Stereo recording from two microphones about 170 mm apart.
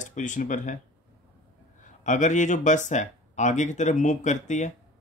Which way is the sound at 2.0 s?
45° left (ahead or behind).